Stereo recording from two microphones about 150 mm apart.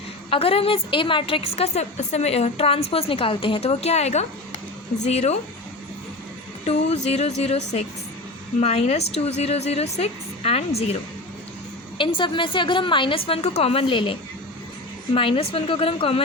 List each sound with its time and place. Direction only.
0.3 s a woman's voice: 40° left (ahead or behind)
6.7 s a woman's voice: 45° left (ahead or behind)
11.9 s a woman's voice: 35° left (ahead or behind)